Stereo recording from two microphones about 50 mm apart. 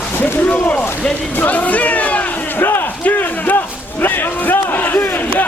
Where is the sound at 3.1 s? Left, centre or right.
Left.